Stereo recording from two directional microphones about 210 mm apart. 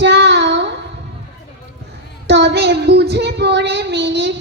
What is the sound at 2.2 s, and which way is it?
Child singing, 55° right (ahead or behind).